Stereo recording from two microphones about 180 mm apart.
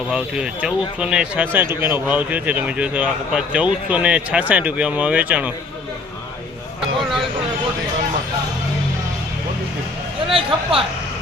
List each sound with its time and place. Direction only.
0.1 s a man's voice: 5° right (ahead or behind)
10.3 s speech: 30° right (ahead or behind)